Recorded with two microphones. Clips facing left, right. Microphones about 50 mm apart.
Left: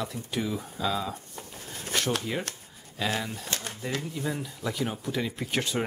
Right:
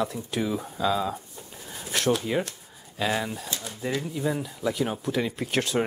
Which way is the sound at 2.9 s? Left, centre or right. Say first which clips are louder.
Right 3 dB; centre.